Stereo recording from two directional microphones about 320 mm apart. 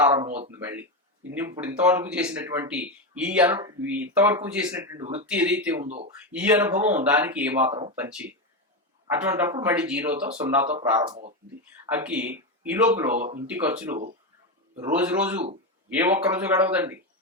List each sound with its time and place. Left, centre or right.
0.0 s speech: centre
0.3 s speech: centre
0.6 s speech: centre
7.7 s speech: centre
7.9 s speech: centre
9.3 s speech: centre
11.1 s speech: right
11.9 s speech: centre
13.1 s speech: right
13.5 s speech: centre